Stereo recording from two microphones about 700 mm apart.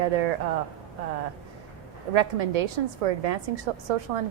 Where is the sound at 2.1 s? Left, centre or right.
Right.